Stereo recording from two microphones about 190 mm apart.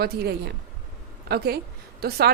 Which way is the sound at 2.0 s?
55° right (ahead or behind).